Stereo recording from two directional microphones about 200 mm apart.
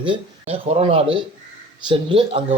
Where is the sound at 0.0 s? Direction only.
25° right (ahead or behind).